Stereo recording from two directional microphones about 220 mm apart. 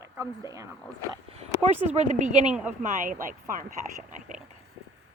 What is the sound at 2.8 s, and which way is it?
Speech, 40° right (ahead or behind).